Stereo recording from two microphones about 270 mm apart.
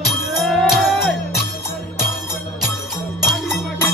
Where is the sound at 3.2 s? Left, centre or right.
Centre.